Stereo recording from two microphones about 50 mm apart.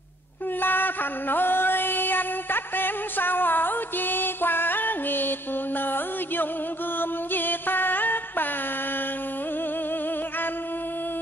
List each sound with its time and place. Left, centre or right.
0.6 s music: left
5.8 s a sound: left
7.0 s music: left